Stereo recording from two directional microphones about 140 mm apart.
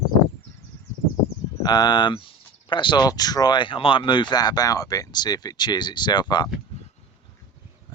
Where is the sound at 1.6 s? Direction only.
30° left (ahead or behind).